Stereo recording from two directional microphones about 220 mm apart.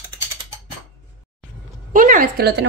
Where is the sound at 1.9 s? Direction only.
40° right (ahead or behind).